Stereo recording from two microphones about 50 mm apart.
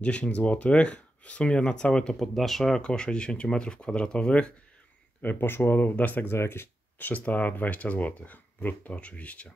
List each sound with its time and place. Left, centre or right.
0.0 s speech: left
2.1 s speech: centre
2.8 s speech: centre
5.2 s speech: left
6.3 s speech: left
7.0 s speech: left